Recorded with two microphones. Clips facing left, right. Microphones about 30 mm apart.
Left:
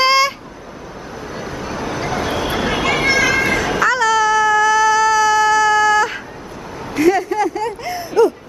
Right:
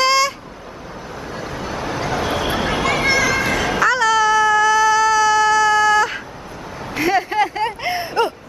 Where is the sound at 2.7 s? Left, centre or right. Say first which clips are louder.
Left 2 dB; centre.